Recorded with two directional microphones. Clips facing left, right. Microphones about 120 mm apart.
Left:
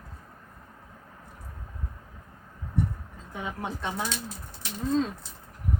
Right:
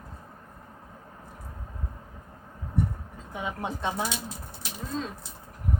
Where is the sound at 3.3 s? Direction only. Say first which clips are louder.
Right 1 dB; 20° right (ahead or behind).